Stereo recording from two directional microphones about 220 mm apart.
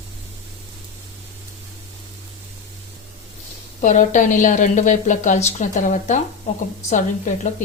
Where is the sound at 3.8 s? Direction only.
35° left (ahead or behind).